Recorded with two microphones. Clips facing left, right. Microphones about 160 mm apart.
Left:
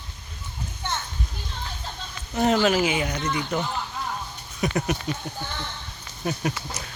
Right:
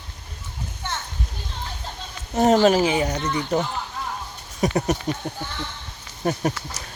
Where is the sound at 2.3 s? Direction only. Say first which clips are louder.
Right 4 dB; 40° right (ahead or behind).